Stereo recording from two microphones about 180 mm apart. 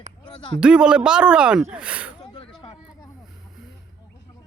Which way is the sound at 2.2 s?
30° left (ahead or behind).